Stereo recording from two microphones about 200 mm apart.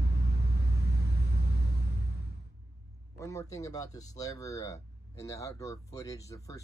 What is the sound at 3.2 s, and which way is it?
Speech, 15° left (ahead or behind).